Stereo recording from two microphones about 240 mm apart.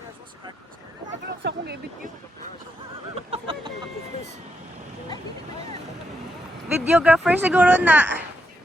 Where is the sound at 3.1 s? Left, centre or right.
Right.